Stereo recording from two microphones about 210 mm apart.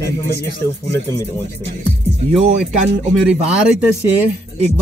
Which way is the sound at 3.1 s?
5° right (ahead or behind).